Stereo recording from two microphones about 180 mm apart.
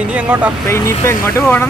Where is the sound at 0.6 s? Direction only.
15° left (ahead or behind).